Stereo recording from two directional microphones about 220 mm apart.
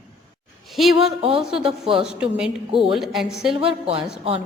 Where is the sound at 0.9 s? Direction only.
25° right (ahead or behind).